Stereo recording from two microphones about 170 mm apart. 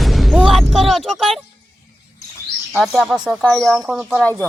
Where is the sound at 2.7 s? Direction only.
Centre (ahead or behind).